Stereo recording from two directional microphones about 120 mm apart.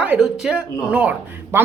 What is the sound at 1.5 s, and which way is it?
Speech, 20° right (ahead or behind).